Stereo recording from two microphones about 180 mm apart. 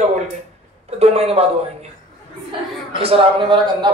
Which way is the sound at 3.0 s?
30° right (ahead or behind).